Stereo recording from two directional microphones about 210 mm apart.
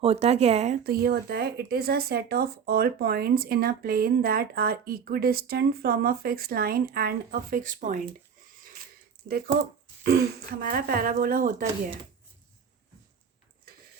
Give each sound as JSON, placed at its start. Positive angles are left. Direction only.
{"t": 0.0, "sound": "speech", "side_deg": -30}
{"t": 0.9, "sound": "speech", "side_deg": -50}
{"t": 10.0, "sound": "speech", "side_deg": -50}